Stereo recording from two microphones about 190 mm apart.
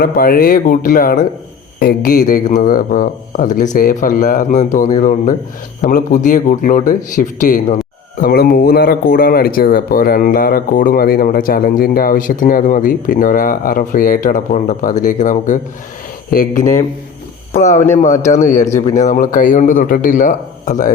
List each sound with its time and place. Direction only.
0.0 s speech: 50° left (ahead or behind)